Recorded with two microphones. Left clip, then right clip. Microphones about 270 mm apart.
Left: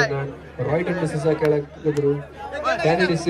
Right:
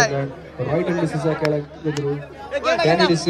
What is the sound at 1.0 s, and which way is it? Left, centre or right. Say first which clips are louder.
Speech: even; left.